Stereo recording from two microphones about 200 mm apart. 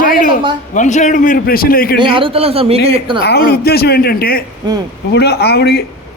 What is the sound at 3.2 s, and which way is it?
A woman's voice, 50° left (ahead or behind).